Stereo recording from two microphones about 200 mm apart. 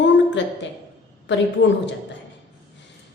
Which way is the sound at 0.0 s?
65° left (ahead or behind).